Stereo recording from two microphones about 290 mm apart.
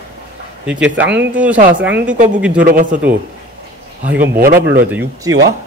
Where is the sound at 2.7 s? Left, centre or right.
Right.